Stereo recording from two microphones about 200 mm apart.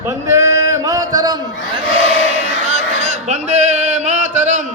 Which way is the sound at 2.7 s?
35° right (ahead or behind).